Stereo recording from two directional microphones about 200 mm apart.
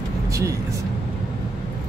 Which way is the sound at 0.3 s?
15° right (ahead or behind).